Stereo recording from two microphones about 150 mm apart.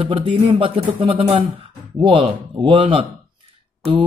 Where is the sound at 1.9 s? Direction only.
35° right (ahead or behind).